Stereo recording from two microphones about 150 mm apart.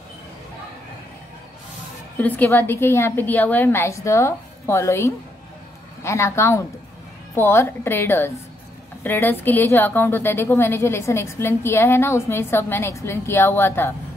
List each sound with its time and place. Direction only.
2.1 s a woman's voice: 10° left (ahead or behind)